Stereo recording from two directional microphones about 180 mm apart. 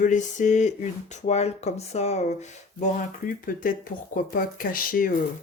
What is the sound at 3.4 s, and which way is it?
Speech, 50° left (ahead or behind).